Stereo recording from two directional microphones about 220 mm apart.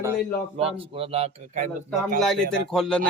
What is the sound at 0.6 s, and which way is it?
A man's voice, 25° right (ahead or behind).